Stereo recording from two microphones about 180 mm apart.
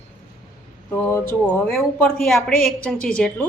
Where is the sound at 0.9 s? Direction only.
10° left (ahead or behind).